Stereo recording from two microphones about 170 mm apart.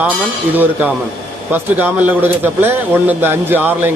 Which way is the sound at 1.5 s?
10° right (ahead or behind).